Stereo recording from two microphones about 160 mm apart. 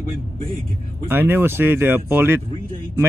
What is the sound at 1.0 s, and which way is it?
Speech, 15° right (ahead or behind).